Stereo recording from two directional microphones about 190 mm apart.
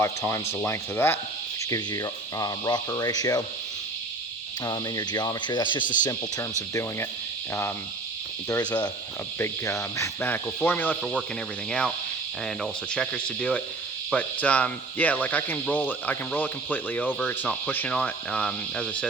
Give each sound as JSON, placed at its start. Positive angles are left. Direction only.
{"t": 0.0, "sound": "speech", "side_deg": 15}
{"t": 1.7, "sound": "insect", "side_deg": 20}
{"t": 4.6, "sound": "insect", "side_deg": 20}
{"t": 8.4, "sound": "insect", "side_deg": 20}
{"t": 9.4, "sound": "speech", "side_deg": 15}